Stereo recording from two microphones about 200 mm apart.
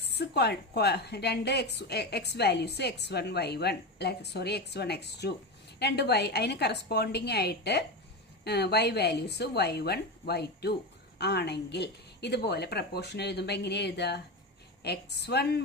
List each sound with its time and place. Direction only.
0.0 s a woman's voice: 55° left (ahead or behind)